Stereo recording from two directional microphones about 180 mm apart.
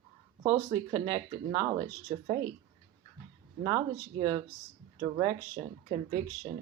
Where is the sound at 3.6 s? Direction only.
25° right (ahead or behind).